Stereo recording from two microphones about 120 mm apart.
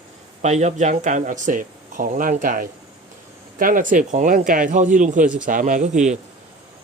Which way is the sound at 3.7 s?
90° right.